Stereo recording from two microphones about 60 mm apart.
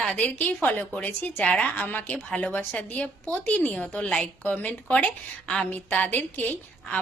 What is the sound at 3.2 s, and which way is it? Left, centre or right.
A woman's voice, centre.